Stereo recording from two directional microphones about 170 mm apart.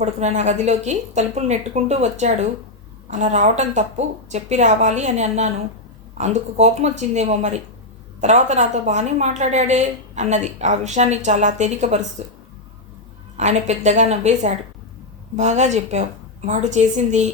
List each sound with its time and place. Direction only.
0.0 s a woman's voice: 40° right (ahead or behind)